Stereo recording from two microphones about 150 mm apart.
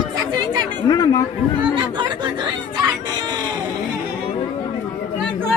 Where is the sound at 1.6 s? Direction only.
30° right (ahead or behind).